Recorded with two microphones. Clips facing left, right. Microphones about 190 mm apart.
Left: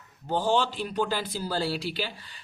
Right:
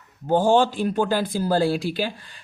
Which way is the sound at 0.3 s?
50° right (ahead or behind).